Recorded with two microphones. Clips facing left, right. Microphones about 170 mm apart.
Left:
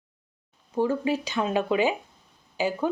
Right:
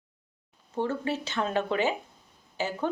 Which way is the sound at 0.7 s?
10° left (ahead or behind).